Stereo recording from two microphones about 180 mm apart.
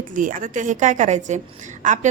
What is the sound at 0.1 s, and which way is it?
A woman's voice, 45° right (ahead or behind).